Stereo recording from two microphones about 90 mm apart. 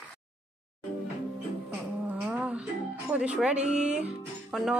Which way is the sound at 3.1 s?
10° right (ahead or behind).